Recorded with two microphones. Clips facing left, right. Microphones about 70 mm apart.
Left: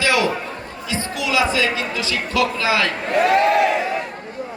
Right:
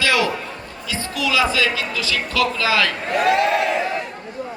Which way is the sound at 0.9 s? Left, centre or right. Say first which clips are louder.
Even; left.